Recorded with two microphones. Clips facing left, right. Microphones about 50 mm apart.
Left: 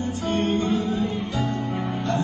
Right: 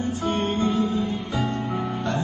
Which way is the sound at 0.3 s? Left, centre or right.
Right.